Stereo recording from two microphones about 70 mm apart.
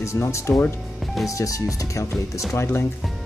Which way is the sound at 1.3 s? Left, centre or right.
Left.